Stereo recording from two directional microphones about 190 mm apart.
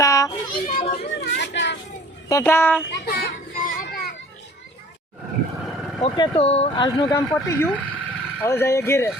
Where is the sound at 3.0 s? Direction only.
55° left (ahead or behind).